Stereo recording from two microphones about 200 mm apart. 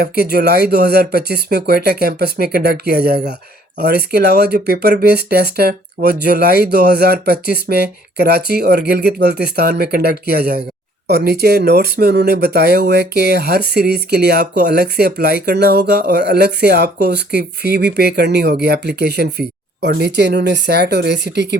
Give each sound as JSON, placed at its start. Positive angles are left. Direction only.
{"t": 0.0, "sound": "speech", "side_deg": -50}